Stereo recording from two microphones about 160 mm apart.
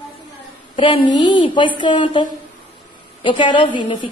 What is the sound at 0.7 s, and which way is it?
A woman's voice, 30° left (ahead or behind).